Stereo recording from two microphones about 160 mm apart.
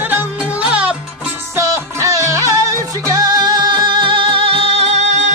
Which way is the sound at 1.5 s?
20° right (ahead or behind).